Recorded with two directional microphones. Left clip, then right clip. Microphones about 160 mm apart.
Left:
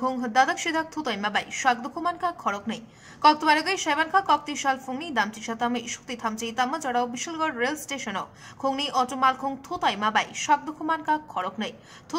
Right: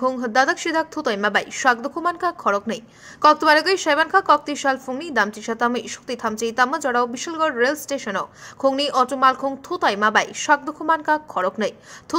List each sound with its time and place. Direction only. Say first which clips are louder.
0.0 s a woman's voice: right 4 dB; 20° right (ahead or behind)